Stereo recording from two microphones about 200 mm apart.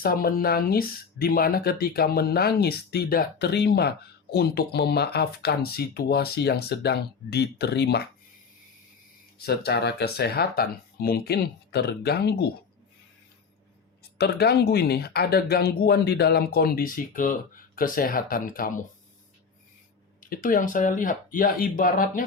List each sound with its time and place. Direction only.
0.0 s speech: 45° left (ahead or behind)
9.4 s speech: 55° left (ahead or behind)
14.0 s speech: 55° left (ahead or behind)
20.3 s speech: 45° left (ahead or behind)